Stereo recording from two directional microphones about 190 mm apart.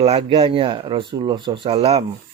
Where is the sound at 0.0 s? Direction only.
30° right (ahead or behind).